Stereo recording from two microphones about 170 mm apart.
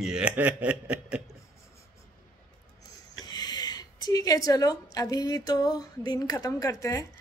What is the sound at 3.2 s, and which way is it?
A woman's voice, 25° left (ahead or behind).